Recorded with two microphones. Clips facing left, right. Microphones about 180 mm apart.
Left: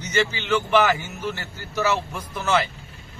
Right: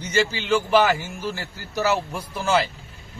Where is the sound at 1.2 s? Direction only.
35° right (ahead or behind).